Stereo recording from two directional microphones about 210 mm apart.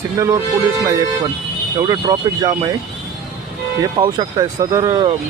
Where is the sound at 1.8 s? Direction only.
20° right (ahead or behind).